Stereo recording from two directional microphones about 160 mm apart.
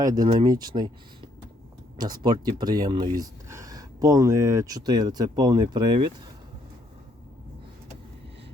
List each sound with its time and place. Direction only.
0.0 s speech: 25° right (ahead or behind)
2.0 s speech: 25° right (ahead or behind)